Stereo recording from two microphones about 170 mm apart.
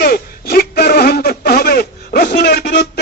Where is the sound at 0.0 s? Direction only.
70° left (ahead or behind).